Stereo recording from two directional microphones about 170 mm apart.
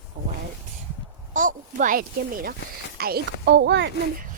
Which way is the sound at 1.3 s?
50° right (ahead or behind).